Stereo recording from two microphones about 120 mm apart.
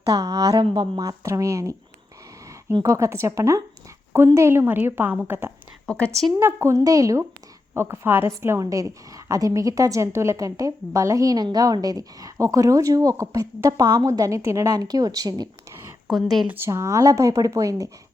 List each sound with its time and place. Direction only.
0.1 s a woman's voice: 30° right (ahead or behind)
0.5 s a woman's voice: 40° right (ahead or behind); by 1.7 s 25° right (ahead or behind)
2.8 s a woman's voice: 25° right (ahead or behind)
5.8 s a woman's voice: 10° left (ahead or behind)
6.4 s a woman's voice: 25° right (ahead or behind)
16.0 s speech: centre (ahead or behind)
16.5 s a woman's voice: 20° right (ahead or behind)